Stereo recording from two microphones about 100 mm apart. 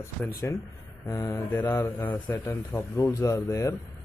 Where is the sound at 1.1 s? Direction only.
30° left (ahead or behind).